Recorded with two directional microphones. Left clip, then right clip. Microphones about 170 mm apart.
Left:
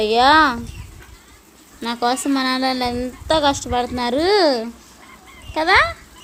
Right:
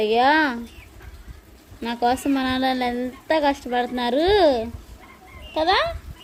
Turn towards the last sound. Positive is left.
turn(degrees=20)  # may be behind; listen again after turning